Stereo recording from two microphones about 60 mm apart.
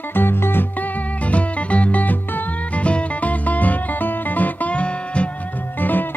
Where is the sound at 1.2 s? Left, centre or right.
Left.